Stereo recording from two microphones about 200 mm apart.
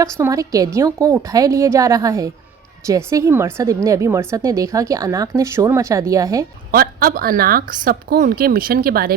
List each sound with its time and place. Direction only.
0.0 s speech: 15° right (ahead or behind)
6.7 s speech: 45° right (ahead or behind)